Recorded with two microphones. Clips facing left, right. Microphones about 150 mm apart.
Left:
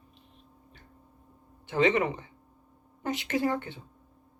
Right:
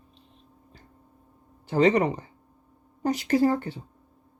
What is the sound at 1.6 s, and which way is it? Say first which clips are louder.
Speech: right 4 dB; 40° right (ahead or behind).